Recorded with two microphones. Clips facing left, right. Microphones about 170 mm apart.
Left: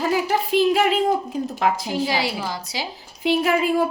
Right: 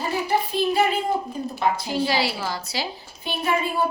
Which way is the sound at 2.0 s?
15° left (ahead or behind).